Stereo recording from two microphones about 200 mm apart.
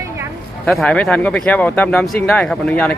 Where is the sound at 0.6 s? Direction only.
5° left (ahead or behind).